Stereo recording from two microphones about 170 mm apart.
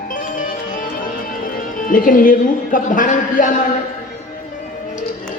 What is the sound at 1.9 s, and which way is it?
A woman's voice, 55° left (ahead or behind).